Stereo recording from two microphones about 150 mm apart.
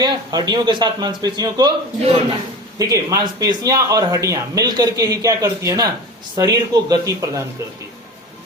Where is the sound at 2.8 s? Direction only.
25° right (ahead or behind).